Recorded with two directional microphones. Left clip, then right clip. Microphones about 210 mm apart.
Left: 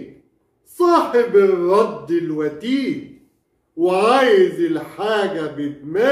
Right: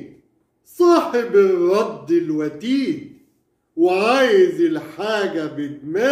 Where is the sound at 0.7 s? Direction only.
45° right (ahead or behind).